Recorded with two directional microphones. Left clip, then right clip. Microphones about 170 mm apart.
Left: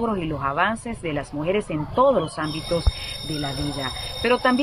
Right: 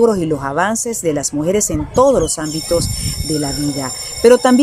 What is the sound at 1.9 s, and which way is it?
Speech, 40° right (ahead or behind).